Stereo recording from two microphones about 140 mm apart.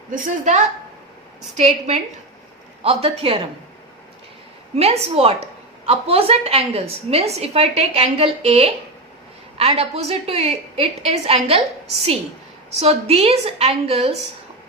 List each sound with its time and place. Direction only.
0.1 s a woman's voice: 60° right (ahead or behind); by 3.4 s 40° right (ahead or behind)
4.7 s a woman's voice: 50° right (ahead or behind)
12.8 s a woman's voice: 45° right (ahead or behind)